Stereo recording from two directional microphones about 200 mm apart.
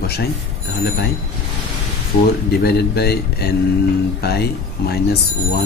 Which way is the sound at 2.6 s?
55° left (ahead or behind).